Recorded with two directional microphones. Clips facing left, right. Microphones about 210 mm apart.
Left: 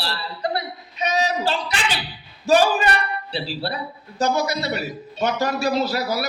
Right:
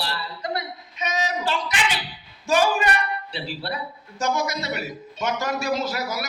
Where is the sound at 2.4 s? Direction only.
35° left (ahead or behind).